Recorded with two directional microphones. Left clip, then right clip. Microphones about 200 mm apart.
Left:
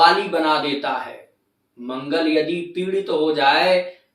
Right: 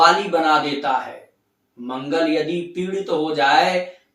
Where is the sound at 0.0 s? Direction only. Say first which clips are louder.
Even; 5° right (ahead or behind).